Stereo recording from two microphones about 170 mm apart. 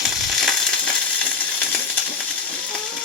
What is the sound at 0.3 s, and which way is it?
Crushing, centre (ahead or behind).